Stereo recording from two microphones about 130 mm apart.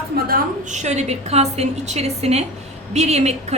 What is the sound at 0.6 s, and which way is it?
A woman's voice, 65° right (ahead or behind).